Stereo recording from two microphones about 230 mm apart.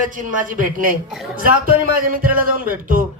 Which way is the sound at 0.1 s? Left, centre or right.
Right.